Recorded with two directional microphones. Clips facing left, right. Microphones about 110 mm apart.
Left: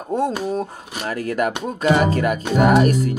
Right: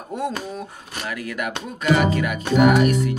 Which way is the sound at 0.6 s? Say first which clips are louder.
Left 6 dB; 40° left (ahead or behind).